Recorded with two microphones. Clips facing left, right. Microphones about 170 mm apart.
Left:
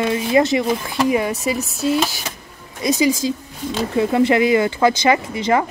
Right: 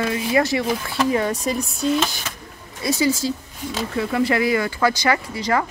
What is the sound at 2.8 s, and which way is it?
Speech, 15° left (ahead or behind).